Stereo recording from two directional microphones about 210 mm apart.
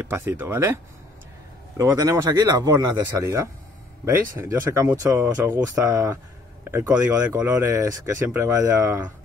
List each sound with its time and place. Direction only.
0.1 s speech: 15° right (ahead or behind)
1.8 s speech: 15° right (ahead or behind)